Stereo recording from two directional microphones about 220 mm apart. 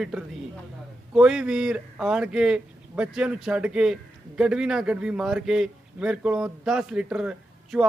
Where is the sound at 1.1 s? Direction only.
5° right (ahead or behind).